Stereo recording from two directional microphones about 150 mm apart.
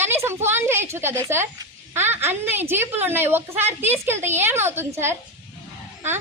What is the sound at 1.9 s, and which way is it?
A woman's voice, 15° right (ahead or behind).